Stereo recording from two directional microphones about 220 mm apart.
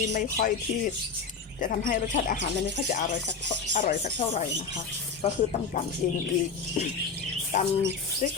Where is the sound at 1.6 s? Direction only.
35° left (ahead or behind).